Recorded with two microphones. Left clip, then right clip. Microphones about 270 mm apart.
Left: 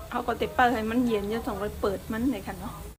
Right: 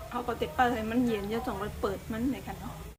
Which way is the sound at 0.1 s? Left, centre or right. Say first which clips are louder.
Left 4 dB; centre.